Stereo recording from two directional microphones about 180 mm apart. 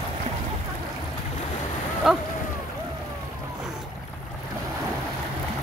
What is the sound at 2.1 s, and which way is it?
Speech, centre (ahead or behind).